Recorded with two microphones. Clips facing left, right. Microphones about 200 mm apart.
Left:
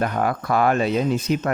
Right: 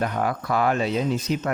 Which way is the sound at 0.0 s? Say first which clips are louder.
Left 2 dB; 55° left (ahead or behind).